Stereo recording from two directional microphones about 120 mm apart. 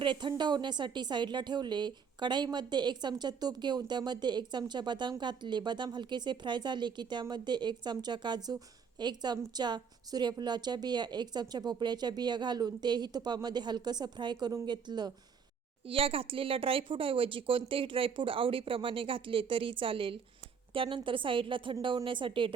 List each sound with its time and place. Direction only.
0.0 s a woman's voice: 40° right (ahead or behind)
15.9 s a woman's voice: 50° right (ahead or behind)